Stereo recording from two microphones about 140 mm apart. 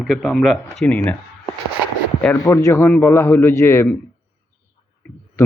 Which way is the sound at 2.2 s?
20° left (ahead or behind).